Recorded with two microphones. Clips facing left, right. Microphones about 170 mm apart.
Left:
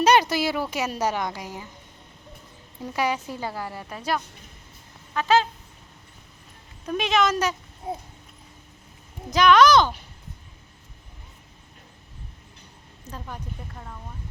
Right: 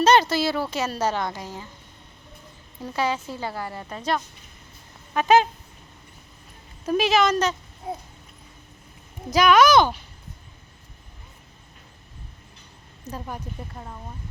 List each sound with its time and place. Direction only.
0.0 s a woman's voice: 15° left (ahead or behind)
2.8 s a woman's voice: 15° left (ahead or behind)
5.1 s a woman's voice: 15° right (ahead or behind)
6.8 s a woman's voice: 5° right (ahead or behind)
9.3 s a woman's voice: 10° right (ahead or behind)
13.1 s a woman's voice: 10° right (ahead or behind)